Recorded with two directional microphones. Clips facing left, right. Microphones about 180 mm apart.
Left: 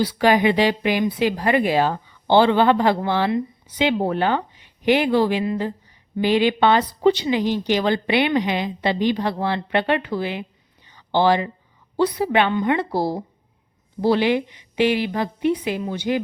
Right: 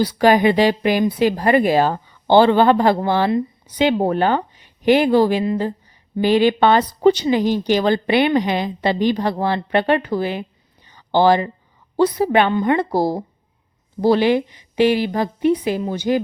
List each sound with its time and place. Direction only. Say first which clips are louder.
0.0 s a woman's voice: right 3 dB; 45° right (ahead or behind)
10.8 s a sound: right 3 dB; 45° right (ahead or behind)
11.9 s a woman's voice: right 3 dB; 40° right (ahead or behind)